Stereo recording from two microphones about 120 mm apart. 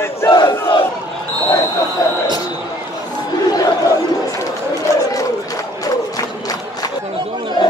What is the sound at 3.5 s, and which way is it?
Chatter, 35° left (ahead or behind).